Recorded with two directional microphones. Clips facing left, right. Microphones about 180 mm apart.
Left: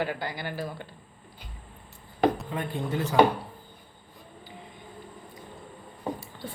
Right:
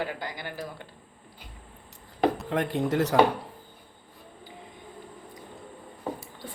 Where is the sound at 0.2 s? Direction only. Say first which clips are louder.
Left 3 dB; 15° right (ahead or behind).